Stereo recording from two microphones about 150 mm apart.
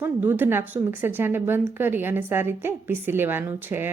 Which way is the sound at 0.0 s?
15° right (ahead or behind).